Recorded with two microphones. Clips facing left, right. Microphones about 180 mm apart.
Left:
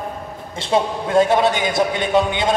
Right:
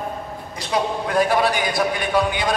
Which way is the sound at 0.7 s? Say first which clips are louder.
Left 4 dB; 25° left (ahead or behind).